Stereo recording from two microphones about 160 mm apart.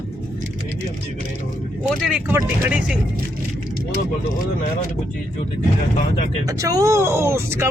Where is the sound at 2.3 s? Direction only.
15° right (ahead or behind).